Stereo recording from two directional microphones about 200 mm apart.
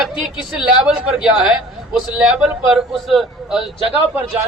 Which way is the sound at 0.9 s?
5° right (ahead or behind).